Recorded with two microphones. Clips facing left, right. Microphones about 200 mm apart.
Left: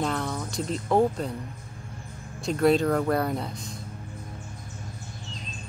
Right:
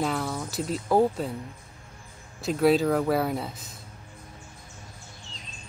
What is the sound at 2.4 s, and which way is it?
Speech, 5° right (ahead or behind).